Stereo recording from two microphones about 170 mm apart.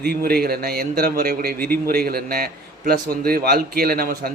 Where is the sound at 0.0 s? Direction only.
65° right (ahead or behind).